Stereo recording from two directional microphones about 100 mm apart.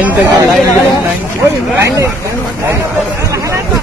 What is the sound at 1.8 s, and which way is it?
Hubbub, 30° right (ahead or behind).